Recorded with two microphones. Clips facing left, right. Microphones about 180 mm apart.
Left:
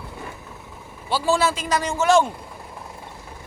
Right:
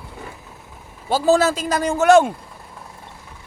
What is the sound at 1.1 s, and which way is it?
A man's voice, 40° right (ahead or behind).